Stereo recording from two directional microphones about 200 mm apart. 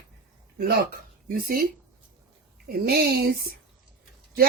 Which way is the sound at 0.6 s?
50° right (ahead or behind).